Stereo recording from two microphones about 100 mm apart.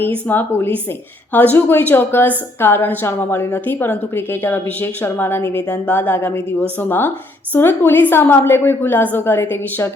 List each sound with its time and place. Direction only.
0.3 s a woman's voice: 20° left (ahead or behind)